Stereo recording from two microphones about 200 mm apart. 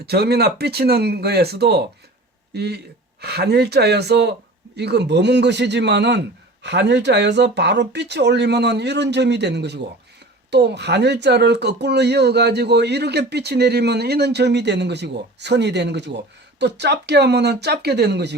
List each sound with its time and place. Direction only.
0.0 s speech: 55° right (ahead or behind)